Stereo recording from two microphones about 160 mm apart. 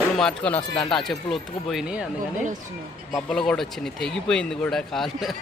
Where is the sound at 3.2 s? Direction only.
5° left (ahead or behind).